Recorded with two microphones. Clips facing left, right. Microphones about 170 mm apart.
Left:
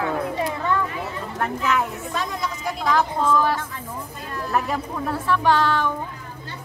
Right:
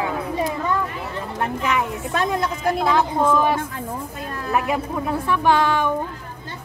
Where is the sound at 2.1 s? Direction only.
60° right (ahead or behind).